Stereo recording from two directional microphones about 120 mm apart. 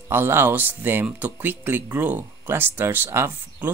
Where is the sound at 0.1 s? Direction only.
20° right (ahead or behind).